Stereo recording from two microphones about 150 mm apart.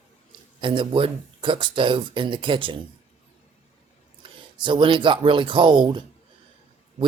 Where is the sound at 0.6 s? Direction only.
35° right (ahead or behind).